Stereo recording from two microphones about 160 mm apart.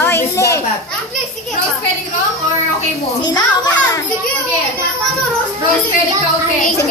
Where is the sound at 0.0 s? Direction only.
15° left (ahead or behind).